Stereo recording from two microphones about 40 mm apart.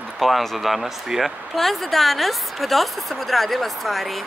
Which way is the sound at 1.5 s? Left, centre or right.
Centre.